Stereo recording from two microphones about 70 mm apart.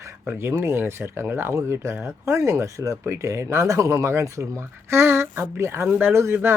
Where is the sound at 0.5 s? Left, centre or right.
Right.